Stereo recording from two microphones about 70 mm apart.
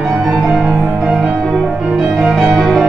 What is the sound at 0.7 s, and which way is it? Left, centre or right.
Music, centre.